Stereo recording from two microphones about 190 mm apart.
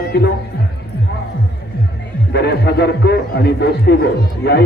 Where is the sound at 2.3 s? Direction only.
60° left (ahead or behind).